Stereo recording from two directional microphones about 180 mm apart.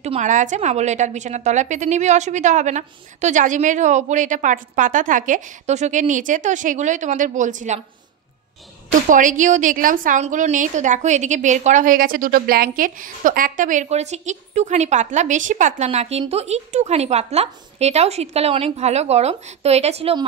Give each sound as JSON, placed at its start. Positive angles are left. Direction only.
{"t": 0.0, "sound": "a woman's voice", "side_deg": -40}
{"t": 9.1, "sound": "a woman's voice", "side_deg": -45}